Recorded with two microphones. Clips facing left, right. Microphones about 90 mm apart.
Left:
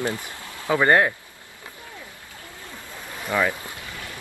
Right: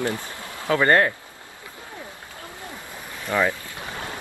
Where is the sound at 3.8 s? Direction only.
25° right (ahead or behind).